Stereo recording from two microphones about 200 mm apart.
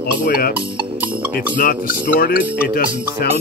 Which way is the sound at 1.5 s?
45° left (ahead or behind).